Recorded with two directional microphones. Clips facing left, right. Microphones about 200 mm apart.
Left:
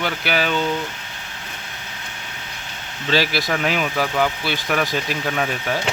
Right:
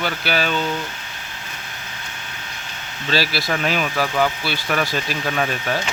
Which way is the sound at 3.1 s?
15° left (ahead or behind).